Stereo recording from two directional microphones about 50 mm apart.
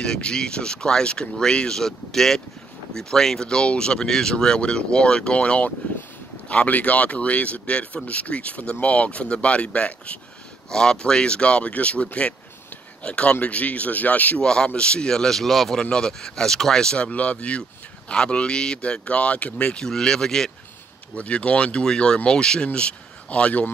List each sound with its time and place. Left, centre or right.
0.0 s speech: centre
10.7 s speech: centre; by 14.4 s left
14.4 s speech: centre
19.9 s speech: centre
21.2 s speech: left